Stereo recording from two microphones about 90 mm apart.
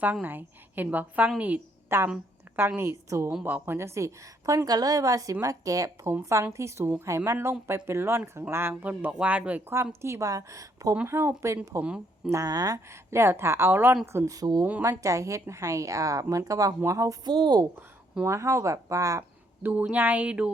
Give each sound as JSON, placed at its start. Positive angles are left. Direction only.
{"t": 0.0, "sound": "a woman's voice", "side_deg": -20}
{"t": 3.4, "sound": "a woman's voice", "side_deg": -25}
{"t": 8.8, "sound": "speech", "side_deg": -15}
{"t": 9.7, "sound": "a woman's voice", "side_deg": -30}
{"t": 11.0, "sound": "a woman's voice", "side_deg": -25}
{"t": 11.8, "sound": "speech", "side_deg": -10}
{"t": 12.3, "sound": "a woman's voice", "side_deg": -45}
{"t": 14.1, "sound": "a woman's voice", "side_deg": -35}
{"t": 17.2, "sound": "a woman's voice", "side_deg": -60}
{"t": 18.3, "sound": "a woman's voice", "side_deg": -35}
{"t": 19.6, "sound": "speech", "side_deg": -15}